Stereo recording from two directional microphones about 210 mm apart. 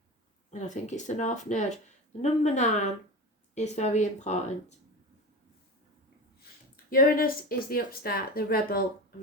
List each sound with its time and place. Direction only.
0.5 s speech: 35° left (ahead or behind)
6.9 s speech: 45° left (ahead or behind)